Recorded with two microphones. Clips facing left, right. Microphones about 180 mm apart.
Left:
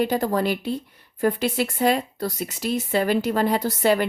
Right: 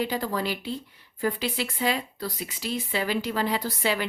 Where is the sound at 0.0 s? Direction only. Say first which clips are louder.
Left 6 dB; 50° left (ahead or behind).